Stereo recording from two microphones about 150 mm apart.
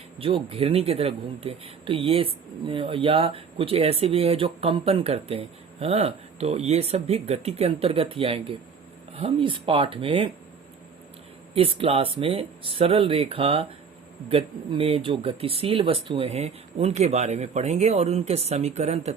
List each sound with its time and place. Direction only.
0.2 s speech: 35° right (ahead or behind)
11.5 s speech: 40° right (ahead or behind)